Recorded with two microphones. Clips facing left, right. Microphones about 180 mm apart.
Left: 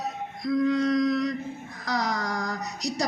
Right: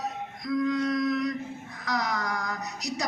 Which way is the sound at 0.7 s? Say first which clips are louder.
Left 3 dB; 35° left (ahead or behind).